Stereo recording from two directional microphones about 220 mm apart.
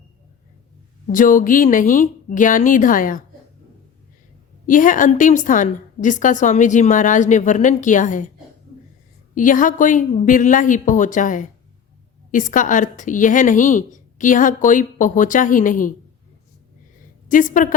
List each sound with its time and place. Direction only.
1.1 s a woman's voice: 35° left (ahead or behind)
4.6 s a woman's voice: 35° left (ahead or behind)
9.3 s a woman's voice: 35° left (ahead or behind)
17.2 s a woman's voice: 35° left (ahead or behind)